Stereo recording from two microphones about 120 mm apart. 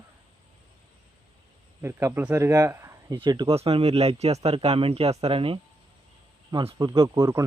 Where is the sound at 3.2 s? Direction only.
35° right (ahead or behind).